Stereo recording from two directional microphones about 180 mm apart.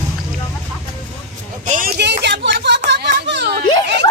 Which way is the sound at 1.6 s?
45° right (ahead or behind).